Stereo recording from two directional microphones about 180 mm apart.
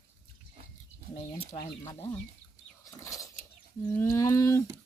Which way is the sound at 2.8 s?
20° left (ahead or behind).